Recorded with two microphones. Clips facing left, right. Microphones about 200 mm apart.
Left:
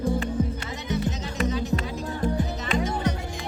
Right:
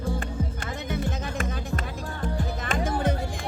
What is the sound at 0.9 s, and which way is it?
Music, 55° right (ahead or behind).